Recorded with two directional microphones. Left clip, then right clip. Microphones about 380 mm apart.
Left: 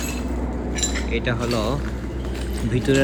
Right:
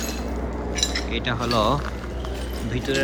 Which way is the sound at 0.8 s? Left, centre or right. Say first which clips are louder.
Even; centre.